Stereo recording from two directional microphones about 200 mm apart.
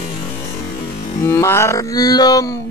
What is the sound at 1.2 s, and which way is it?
Music, 15° left (ahead or behind).